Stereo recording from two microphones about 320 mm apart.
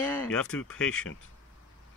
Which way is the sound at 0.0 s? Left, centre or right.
Centre.